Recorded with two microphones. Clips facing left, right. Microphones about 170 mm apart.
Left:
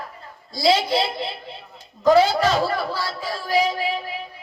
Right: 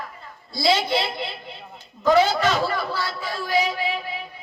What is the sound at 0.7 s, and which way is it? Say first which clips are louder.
A man's voice: left 2 dB; 35° left (ahead or behind).